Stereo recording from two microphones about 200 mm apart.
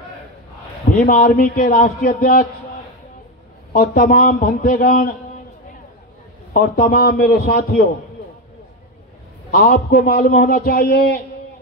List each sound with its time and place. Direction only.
1.0 s a man's voice: 45° left (ahead or behind)
3.7 s a man's voice: 50° left (ahead or behind)
6.5 s a man's voice: 45° left (ahead or behind)
9.5 s a man's voice: 45° left (ahead or behind)